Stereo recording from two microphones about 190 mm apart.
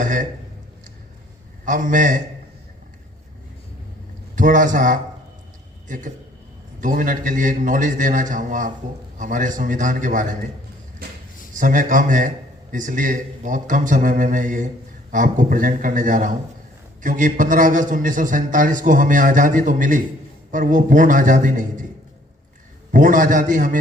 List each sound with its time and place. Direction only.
0.0 s a sound: 45° right (ahead or behind)
1.6 s a man's voice: 45° right (ahead or behind)
4.4 s a man's voice: 45° right (ahead or behind)
11.5 s a man's voice: 45° right (ahead or behind)
22.9 s a man's voice: 45° right (ahead or behind)